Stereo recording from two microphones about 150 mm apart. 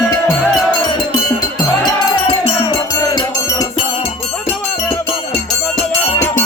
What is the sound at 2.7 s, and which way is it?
Music, 25° left (ahead or behind).